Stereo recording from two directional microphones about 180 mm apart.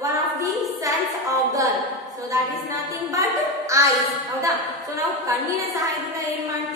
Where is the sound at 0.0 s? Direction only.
20° right (ahead or behind).